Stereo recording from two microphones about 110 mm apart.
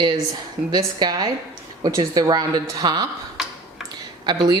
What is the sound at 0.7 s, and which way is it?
A woman's voice, 40° right (ahead or behind).